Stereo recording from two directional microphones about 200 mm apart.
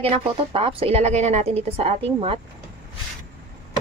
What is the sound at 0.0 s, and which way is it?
A woman's voice, 30° right (ahead or behind).